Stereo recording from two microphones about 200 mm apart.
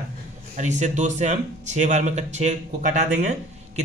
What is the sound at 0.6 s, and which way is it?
Speech, 35° right (ahead or behind).